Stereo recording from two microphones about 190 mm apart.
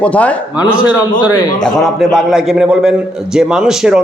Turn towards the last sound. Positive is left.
turn(degrees=-5)  # may be behind; listen again after turning